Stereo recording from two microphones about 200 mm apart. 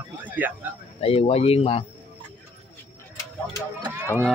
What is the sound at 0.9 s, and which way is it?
Speech, 30° left (ahead or behind).